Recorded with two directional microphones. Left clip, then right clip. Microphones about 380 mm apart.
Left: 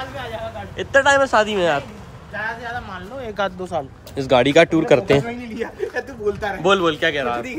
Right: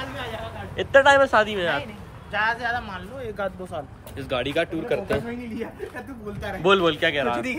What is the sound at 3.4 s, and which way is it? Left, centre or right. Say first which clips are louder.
Speech: left 8 dB; left.